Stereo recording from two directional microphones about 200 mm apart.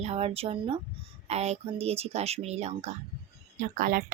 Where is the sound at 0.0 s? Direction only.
30° right (ahead or behind).